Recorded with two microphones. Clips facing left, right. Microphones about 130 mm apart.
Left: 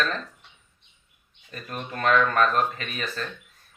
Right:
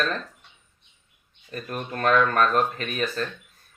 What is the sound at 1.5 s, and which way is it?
Speech, 40° right (ahead or behind).